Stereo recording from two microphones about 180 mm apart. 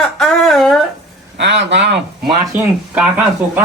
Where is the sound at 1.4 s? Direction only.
75° right (ahead or behind).